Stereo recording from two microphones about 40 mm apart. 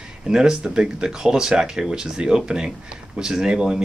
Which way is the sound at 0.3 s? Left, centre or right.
Centre.